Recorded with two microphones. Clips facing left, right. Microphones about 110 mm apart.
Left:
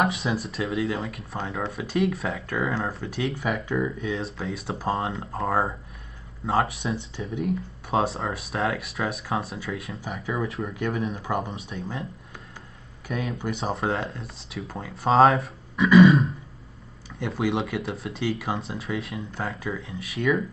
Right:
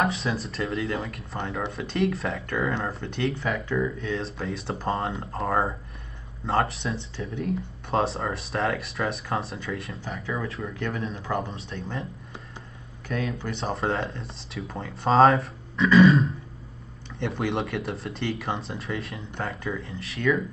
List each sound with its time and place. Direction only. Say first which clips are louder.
0.2 s speech: left 1 dB; centre (ahead or behind)
4.1 s speech: even; centre (ahead or behind)
7.2 s speech: even; 15° left (ahead or behind)
7.9 s speech: even; centre (ahead or behind)
10.2 s speech: left 3 dB; 15° left (ahead or behind)
11.7 s speech: even; centre (ahead or behind)
13.1 s speech: even; 10° left (ahead or behind)